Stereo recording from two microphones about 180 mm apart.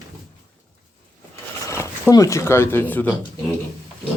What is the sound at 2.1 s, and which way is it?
Speech, 15° left (ahead or behind).